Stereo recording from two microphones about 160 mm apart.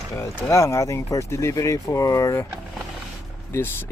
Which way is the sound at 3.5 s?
15° left (ahead or behind).